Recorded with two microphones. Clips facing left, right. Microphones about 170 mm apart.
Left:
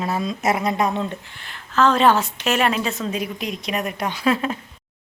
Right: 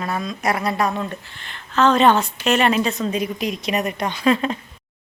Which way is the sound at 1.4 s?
5° left (ahead or behind).